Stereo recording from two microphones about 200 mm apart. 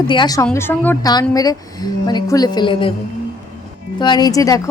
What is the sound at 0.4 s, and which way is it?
A woman's voice, 10° left (ahead or behind).